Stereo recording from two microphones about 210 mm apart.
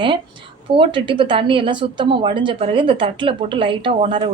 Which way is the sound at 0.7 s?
25° right (ahead or behind).